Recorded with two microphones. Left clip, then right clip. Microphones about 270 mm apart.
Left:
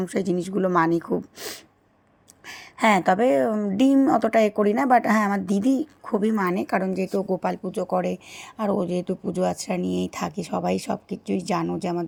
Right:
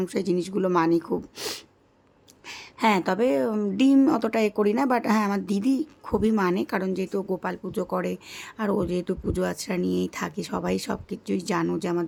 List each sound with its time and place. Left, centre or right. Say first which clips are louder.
0.0 s a woman's voice: left 1 dB; centre